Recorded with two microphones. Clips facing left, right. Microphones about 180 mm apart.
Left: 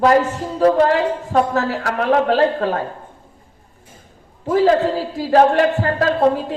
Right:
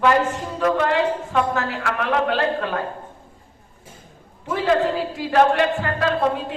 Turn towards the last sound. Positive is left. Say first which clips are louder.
# left 5 dB
turn(degrees=35)  # may be behind; listen again after turning